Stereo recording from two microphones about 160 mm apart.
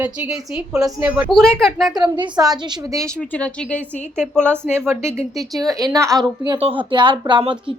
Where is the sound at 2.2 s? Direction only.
25° right (ahead or behind).